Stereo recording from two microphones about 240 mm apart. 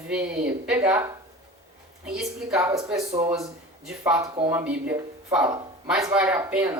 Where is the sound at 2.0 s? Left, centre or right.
Centre.